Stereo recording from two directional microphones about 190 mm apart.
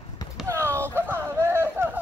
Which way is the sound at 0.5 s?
15° right (ahead or behind).